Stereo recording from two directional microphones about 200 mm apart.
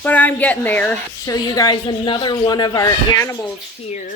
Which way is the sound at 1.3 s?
20° left (ahead or behind).